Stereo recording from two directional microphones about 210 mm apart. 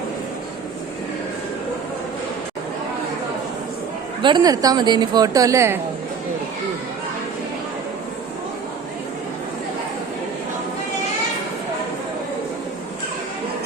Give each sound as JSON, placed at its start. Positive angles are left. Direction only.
{"t": 4.2, "sound": "speech", "side_deg": -20}